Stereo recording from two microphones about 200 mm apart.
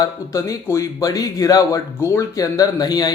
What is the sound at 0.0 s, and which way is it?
Speech, 15° left (ahead or behind).